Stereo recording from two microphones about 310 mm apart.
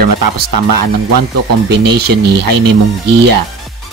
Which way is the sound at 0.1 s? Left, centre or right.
Right.